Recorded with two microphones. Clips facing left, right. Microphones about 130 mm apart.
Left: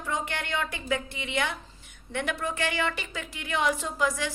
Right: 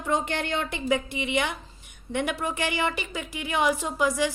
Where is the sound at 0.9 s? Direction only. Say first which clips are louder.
Right 8 dB; 15° right (ahead or behind).